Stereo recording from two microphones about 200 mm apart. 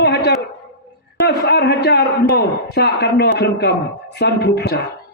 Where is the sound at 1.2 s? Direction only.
55° left (ahead or behind).